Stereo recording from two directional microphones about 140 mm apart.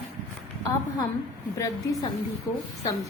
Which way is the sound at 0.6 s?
25° left (ahead or behind).